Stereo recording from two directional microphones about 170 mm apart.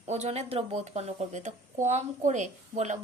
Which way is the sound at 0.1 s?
40° right (ahead or behind).